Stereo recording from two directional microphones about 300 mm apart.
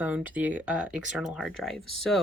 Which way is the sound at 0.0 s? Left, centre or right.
Centre.